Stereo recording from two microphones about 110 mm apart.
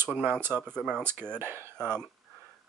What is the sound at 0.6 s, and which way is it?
Speech, 10° left (ahead or behind).